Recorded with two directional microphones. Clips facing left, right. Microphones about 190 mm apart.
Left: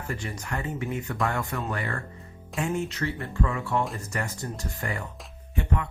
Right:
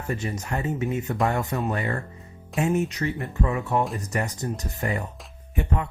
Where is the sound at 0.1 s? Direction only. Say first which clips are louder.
Right 5 dB; 25° right (ahead or behind).